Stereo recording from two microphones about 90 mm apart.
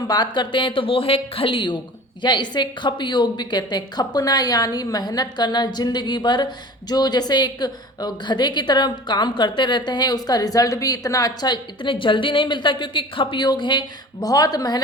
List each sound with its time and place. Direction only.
0.1 s a woman's voice: 55° left (ahead or behind)